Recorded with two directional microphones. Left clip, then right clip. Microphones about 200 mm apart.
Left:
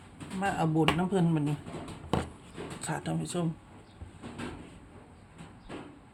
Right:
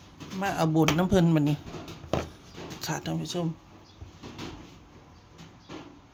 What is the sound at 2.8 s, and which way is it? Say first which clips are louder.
Speech: right 3 dB; 10° right (ahead or behind).